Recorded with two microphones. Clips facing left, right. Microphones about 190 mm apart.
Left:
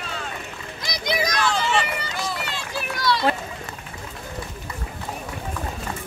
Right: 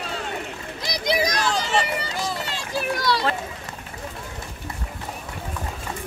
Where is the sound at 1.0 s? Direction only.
35° right (ahead or behind).